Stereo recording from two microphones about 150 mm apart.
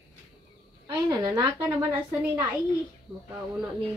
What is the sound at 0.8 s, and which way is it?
Speech, 25° right (ahead or behind).